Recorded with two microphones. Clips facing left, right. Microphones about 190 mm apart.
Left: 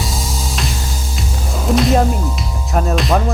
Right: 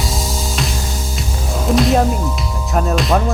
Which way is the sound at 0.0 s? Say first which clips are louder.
Right 1 dB; centre (ahead or behind).